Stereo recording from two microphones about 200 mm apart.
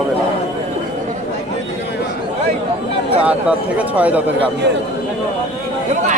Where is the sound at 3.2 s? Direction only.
5° right (ahead or behind).